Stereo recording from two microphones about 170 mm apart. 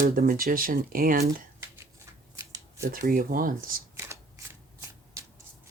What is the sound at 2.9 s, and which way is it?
Speech, 55° right (ahead or behind).